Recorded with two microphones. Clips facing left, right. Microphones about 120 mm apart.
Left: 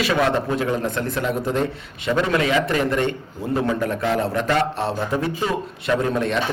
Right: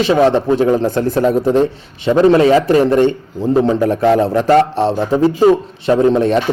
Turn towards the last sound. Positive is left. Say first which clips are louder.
# right 9 dB
turn(degrees=-35)  # may be behind; listen again after turning